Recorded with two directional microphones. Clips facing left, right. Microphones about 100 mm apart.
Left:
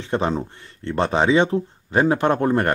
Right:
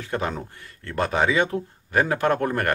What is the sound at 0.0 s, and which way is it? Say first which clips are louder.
Speech: left 5 dB; 25° left (ahead or behind).